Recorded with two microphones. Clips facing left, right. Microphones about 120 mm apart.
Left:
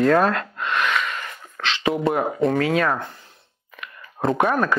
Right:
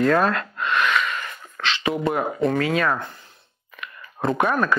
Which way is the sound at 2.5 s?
40° left (ahead or behind).